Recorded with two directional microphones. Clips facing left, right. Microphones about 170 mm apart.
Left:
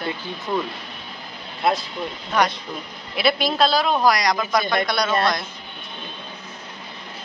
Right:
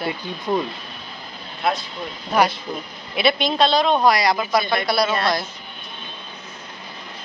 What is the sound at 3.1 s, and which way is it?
A man's voice, centre (ahead or behind).